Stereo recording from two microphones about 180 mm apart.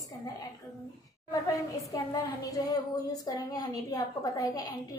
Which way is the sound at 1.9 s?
20° left (ahead or behind).